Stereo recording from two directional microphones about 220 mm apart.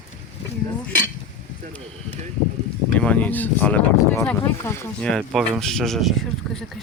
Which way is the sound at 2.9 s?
5° left (ahead or behind).